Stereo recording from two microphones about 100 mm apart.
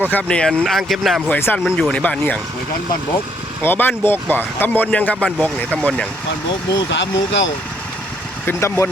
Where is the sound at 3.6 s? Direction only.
20° left (ahead or behind).